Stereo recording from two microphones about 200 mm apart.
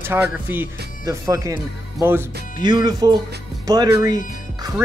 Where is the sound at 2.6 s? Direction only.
20° right (ahead or behind).